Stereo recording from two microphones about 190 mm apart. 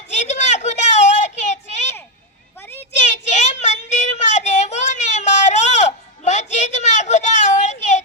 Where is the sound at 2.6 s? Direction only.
10° left (ahead or behind).